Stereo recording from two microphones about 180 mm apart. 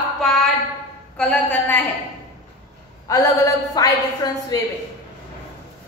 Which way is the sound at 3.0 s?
20° left (ahead or behind).